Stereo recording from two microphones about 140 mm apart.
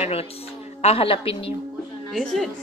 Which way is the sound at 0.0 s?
45° left (ahead or behind).